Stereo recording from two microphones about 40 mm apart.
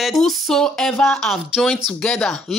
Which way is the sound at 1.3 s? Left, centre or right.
Centre.